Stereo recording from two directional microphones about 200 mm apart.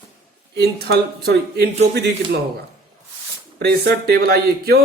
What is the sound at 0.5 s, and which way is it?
Speech, 55° right (ahead or behind).